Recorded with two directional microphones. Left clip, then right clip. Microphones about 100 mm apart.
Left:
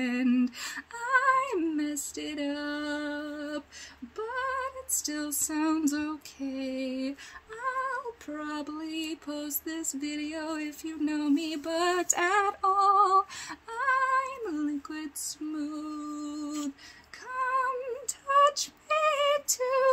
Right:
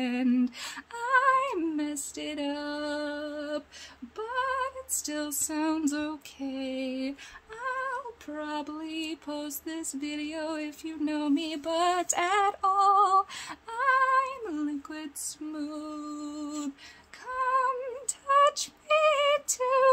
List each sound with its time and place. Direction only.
0.0 s female singing: 35° right (ahead or behind)
7.6 s music: 50° right (ahead or behind); by 16.7 s 65° right (ahead or behind)
17.4 s female singing: 50° right (ahead or behind)